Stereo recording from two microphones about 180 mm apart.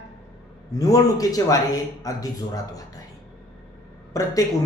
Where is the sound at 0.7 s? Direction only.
20° left (ahead or behind).